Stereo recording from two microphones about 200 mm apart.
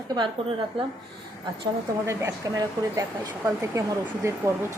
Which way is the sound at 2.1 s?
15° right (ahead or behind).